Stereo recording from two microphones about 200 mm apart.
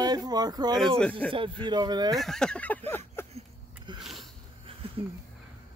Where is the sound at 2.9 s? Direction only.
10° left (ahead or behind).